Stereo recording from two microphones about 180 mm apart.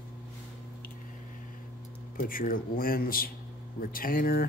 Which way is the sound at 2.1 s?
50° left (ahead or behind).